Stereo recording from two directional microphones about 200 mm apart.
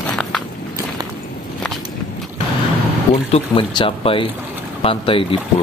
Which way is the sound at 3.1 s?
30° left (ahead or behind).